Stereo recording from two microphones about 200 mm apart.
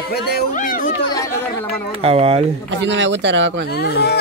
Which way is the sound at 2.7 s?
60° right (ahead or behind).